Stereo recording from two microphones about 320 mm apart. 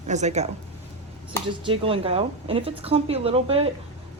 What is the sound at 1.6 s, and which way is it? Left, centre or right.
A woman's voice, centre.